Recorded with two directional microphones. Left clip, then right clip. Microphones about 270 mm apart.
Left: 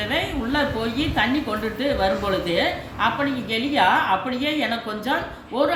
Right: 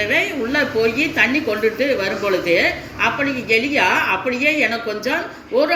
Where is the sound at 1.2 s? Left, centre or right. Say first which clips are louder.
Right 5 dB; centre.